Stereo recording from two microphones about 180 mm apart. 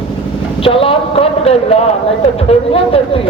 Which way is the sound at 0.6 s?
30° left (ahead or behind).